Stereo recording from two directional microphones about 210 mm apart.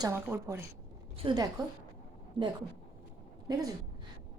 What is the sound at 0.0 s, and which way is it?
A woman's voice, 10° right (ahead or behind).